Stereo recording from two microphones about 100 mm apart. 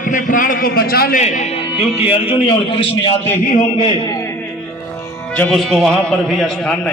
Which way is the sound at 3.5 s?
75° left (ahead or behind).